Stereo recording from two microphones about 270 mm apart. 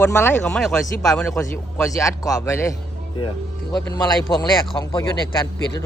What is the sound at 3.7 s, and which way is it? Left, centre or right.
Speech, centre.